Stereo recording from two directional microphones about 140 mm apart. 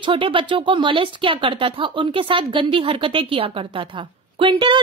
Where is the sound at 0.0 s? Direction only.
35° right (ahead or behind).